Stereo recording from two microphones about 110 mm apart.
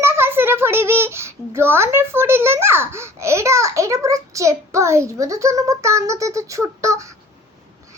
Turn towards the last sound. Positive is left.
turn(degrees=-30)  # may be behind; listen again after turning